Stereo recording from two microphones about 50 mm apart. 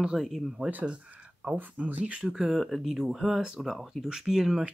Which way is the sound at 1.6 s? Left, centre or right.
Right.